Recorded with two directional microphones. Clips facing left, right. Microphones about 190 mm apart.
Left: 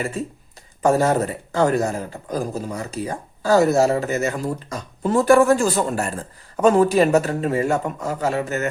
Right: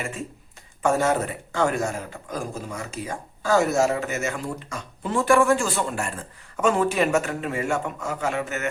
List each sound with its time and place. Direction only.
0.0 s a man's voice: 35° left (ahead or behind)